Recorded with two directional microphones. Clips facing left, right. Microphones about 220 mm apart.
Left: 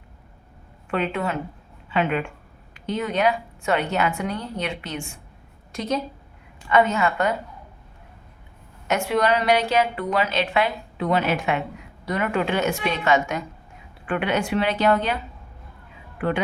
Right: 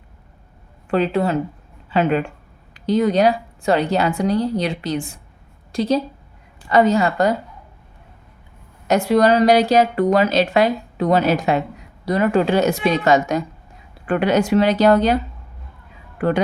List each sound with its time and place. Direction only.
0.9 s a woman's voice: 35° right (ahead or behind)
8.9 s a woman's voice: 35° right (ahead or behind)